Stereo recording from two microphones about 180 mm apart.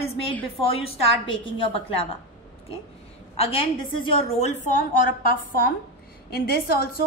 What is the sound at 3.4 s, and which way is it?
A woman's voice, 30° left (ahead or behind).